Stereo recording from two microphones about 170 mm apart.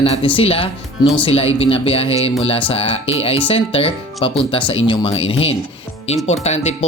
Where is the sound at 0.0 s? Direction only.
35° left (ahead or behind).